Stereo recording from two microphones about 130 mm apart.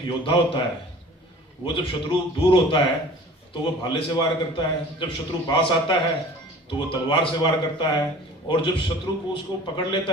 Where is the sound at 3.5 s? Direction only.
40° left (ahead or behind).